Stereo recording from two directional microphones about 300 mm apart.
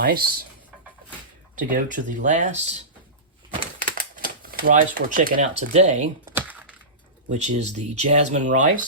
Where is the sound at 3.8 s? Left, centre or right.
Right.